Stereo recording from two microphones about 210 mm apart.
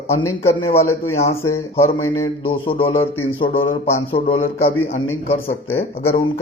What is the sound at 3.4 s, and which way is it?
Speech, 40° left (ahead or behind).